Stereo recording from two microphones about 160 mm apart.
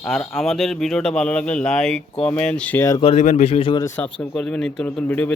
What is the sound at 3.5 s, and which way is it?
Speech, 35° left (ahead or behind).